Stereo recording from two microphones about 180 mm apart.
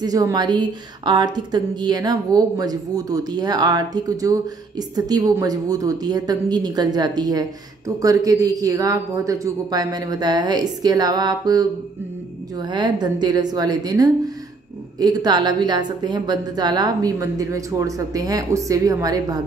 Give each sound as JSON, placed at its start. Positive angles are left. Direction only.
{"t": 0.0, "sound": "a woman's voice", "side_deg": -20}